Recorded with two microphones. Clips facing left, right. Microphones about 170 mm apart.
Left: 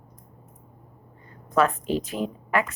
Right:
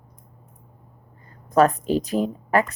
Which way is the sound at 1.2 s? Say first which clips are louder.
Right 5 dB; 40° right (ahead or behind).